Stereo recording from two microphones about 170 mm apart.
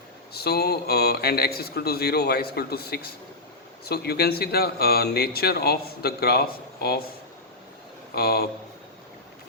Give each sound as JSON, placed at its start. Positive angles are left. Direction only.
{"t": 0.3, "sound": "speech", "side_deg": 70}
{"t": 8.1, "sound": "speech", "side_deg": 65}